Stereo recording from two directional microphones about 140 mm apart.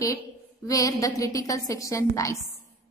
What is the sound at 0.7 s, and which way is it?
A woman's voice, 25° left (ahead or behind).